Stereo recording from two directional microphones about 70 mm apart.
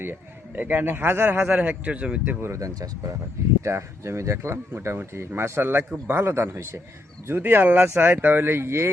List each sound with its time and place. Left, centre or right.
0.0 s a man's voice: right
2.4 s speech: right
3.6 s a man's voice: right